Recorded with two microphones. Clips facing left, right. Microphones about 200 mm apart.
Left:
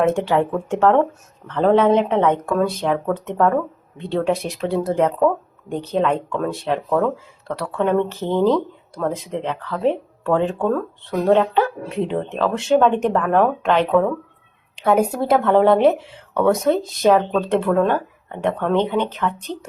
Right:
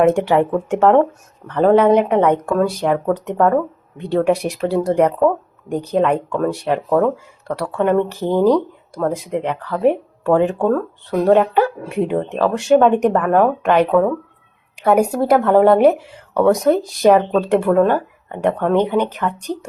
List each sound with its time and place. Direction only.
0.0 s speech: 15° right (ahead or behind)
6.0 s speech: 10° right (ahead or behind)